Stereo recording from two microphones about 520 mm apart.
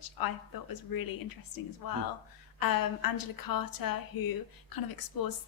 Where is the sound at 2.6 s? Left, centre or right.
Left.